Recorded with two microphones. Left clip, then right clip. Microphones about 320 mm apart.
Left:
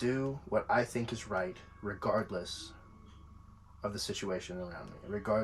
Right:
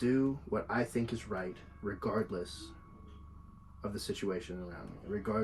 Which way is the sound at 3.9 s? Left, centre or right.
Left.